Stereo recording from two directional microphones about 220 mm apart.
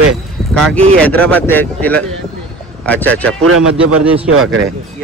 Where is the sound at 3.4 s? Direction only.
80° right.